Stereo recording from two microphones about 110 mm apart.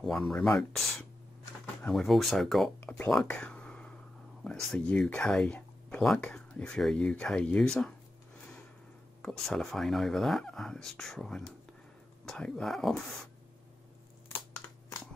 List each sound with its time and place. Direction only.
0.0 s speech: 5° left (ahead or behind)
2.8 s speech: 15° left (ahead or behind)
3.3 s a sound: 10° left (ahead or behind)
4.5 s speech: 5° left (ahead or behind)
9.2 s speech: 5° left (ahead or behind)